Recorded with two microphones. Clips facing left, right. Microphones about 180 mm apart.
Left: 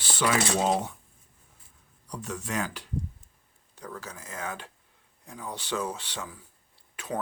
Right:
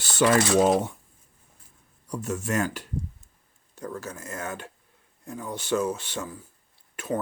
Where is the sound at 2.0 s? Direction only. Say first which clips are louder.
Right 6 dB; 45° right (ahead or behind).